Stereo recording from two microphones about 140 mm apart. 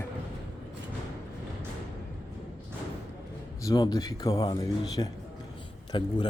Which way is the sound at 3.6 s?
30° left (ahead or behind).